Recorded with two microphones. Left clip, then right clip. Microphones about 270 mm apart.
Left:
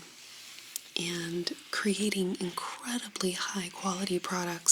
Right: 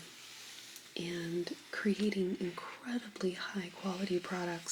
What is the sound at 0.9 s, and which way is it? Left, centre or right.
Speech, left.